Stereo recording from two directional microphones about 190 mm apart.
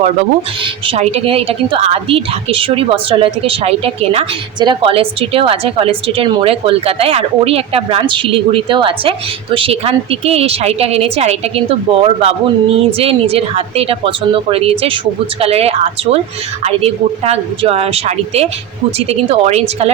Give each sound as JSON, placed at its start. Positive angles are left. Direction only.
{"t": 0.6, "sound": "a woman's voice", "side_deg": -30}